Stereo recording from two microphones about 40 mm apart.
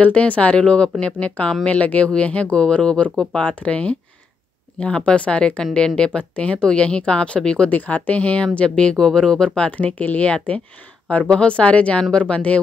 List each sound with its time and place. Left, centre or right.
0.1 s speech: left
5.6 s speech: centre
7.7 s speech: left; by 9.5 s centre
9.6 s speech: left